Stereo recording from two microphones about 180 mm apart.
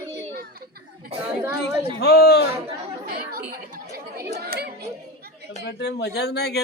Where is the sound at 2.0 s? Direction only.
65° left (ahead or behind).